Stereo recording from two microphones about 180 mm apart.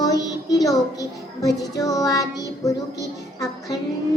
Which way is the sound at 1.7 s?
20° left (ahead or behind).